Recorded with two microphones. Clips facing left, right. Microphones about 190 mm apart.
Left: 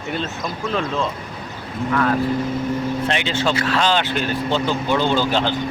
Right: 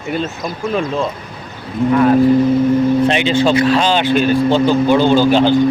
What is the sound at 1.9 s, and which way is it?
Speech, 20° right (ahead or behind).